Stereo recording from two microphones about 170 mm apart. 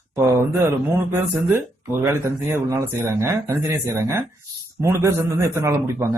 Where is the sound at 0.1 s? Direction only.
15° right (ahead or behind).